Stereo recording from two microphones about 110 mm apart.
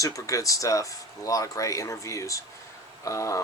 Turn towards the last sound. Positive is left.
turn(degrees=30)  # may be behind; listen again after turning